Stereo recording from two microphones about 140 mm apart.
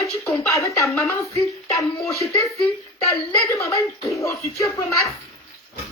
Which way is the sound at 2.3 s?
25° left (ahead or behind).